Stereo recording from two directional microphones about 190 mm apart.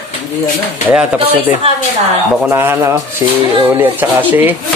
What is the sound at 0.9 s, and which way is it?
A man's voice, 5° right (ahead or behind).